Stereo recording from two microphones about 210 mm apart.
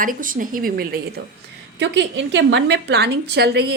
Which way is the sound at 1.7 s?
55° right (ahead or behind).